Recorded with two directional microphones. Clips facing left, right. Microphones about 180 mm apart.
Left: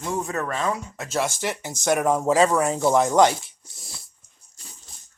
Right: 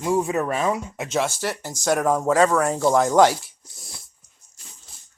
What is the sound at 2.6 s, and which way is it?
Speech, 10° left (ahead or behind).